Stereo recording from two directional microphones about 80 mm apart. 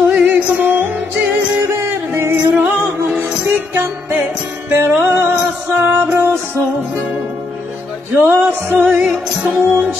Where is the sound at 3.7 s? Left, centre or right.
Right.